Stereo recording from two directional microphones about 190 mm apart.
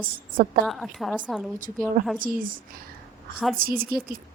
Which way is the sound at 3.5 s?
50° right (ahead or behind).